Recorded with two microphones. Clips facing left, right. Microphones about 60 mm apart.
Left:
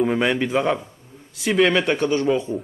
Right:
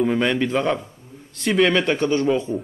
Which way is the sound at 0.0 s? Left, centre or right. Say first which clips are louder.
Even; centre.